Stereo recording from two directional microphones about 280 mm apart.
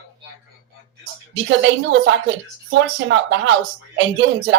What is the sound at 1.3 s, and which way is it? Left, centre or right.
A woman's voice, right.